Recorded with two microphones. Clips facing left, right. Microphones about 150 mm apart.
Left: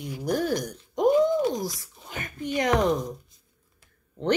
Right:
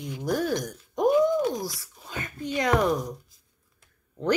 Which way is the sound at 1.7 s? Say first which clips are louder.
Right 1 dB; 20° left (ahead or behind).